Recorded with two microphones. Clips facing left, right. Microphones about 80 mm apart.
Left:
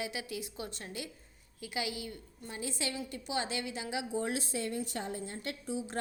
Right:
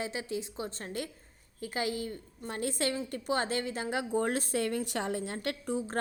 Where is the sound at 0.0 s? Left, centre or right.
Right.